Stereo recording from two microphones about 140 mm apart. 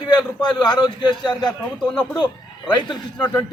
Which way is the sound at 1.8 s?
5° left (ahead or behind).